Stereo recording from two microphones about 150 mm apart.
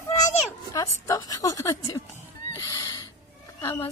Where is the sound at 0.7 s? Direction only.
25° left (ahead or behind).